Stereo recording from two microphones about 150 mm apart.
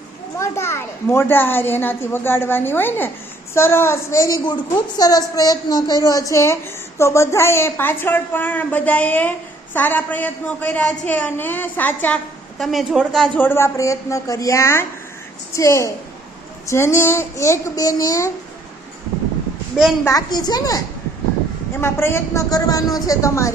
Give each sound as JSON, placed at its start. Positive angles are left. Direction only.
{"t": 0.3, "sound": "a woman's voice", "side_deg": 20}
{"t": 4.4, "sound": "a woman's voice", "side_deg": 30}
{"t": 20.1, "sound": "a woman's voice", "side_deg": 25}